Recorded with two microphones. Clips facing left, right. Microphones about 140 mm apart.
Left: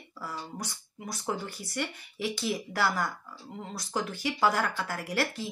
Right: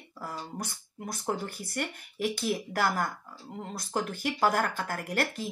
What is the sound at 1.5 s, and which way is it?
Speech, 50° right (ahead or behind).